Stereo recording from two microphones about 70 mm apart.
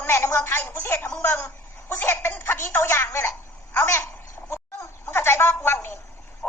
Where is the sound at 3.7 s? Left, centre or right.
Left.